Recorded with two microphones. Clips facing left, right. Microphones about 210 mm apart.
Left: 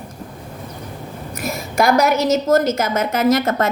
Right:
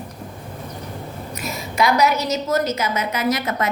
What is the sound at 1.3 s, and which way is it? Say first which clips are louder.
A woman's voice: left 6 dB; 50° left (ahead or behind).